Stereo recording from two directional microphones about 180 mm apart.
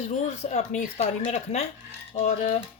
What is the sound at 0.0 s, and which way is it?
Speech, 40° left (ahead or behind).